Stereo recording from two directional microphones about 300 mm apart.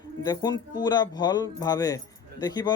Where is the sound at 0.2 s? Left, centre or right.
Centre.